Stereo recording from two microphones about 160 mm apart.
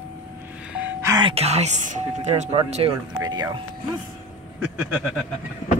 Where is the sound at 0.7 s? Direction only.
10° right (ahead or behind).